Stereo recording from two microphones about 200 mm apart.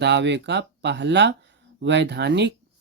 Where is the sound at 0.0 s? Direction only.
60° right (ahead or behind).